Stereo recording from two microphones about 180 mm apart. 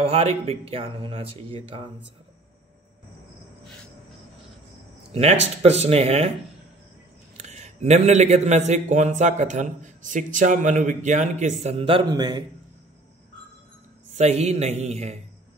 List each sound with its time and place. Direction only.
0.0 s a man's voice: 35° right (ahead or behind)
5.1 s a man's voice: 35° right (ahead or behind)
7.3 s a man's voice: 40° right (ahead or behind); by 12.4 s 20° right (ahead or behind)
14.1 s a man's voice: 40° right (ahead or behind)